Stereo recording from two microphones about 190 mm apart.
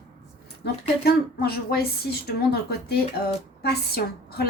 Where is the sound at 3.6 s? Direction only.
55° left (ahead or behind).